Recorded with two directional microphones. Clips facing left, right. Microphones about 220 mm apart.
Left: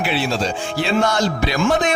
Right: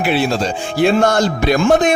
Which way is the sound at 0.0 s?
50° right (ahead or behind).